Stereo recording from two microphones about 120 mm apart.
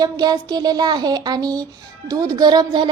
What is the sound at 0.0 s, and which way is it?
A woman's voice, 35° right (ahead or behind).